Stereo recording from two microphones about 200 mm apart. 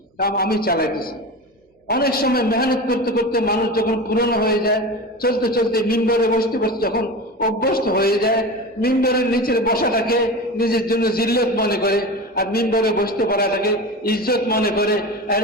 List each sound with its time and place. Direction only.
0.2 s a man's voice: 50° left (ahead or behind)